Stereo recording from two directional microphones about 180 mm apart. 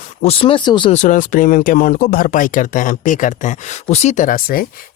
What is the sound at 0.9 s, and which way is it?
Speech, 45° left (ahead or behind).